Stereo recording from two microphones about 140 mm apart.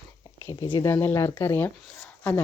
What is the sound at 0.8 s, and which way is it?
Speech, 15° left (ahead or behind).